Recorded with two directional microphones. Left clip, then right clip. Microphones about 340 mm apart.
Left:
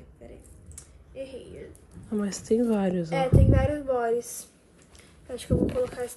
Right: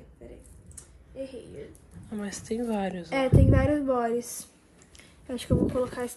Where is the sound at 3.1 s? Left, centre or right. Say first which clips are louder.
Right 2 dB; right.